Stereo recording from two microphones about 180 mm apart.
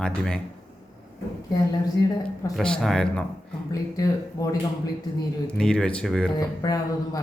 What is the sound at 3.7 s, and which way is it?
Speech, 20° left (ahead or behind).